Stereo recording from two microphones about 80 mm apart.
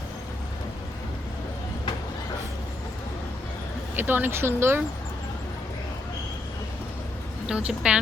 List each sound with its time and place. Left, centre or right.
3.9 s speech: right
7.4 s a woman's voice: centre